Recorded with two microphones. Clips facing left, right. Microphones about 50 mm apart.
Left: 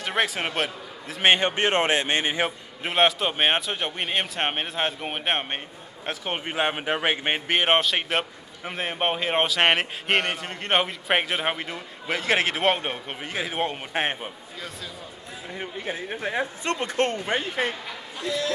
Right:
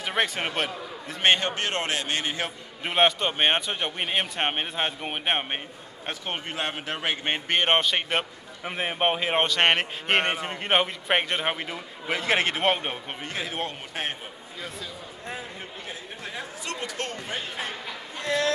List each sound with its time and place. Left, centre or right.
0.0 s a man's voice: centre
1.3 s a man's voice: left
2.8 s a man's voice: centre
6.0 s a man's voice: centre
10.3 s a man's voice: centre
13.9 s speech: left
15.6 s speech: left
18.2 s speech: right